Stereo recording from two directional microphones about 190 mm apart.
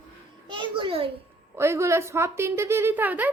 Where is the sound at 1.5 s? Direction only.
15° right (ahead or behind).